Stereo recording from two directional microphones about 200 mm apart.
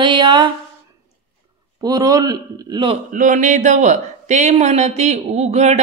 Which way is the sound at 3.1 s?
40° right (ahead or behind).